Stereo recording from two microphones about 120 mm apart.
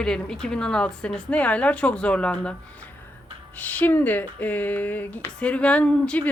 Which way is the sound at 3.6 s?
15° left (ahead or behind).